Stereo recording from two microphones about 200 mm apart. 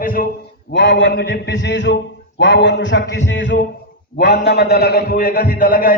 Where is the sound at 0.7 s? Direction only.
60° left (ahead or behind).